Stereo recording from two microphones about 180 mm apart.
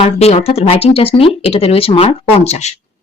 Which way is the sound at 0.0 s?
35° left (ahead or behind).